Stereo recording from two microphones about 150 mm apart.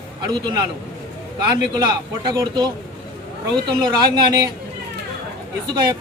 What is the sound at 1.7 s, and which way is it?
A man's voice, 30° right (ahead or behind).